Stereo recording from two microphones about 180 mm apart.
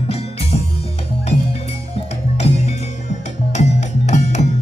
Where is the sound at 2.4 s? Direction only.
40° left (ahead or behind).